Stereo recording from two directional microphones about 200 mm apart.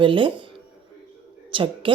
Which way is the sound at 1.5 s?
25° right (ahead or behind).